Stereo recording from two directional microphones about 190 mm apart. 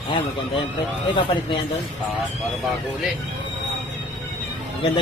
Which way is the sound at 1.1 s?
25° left (ahead or behind).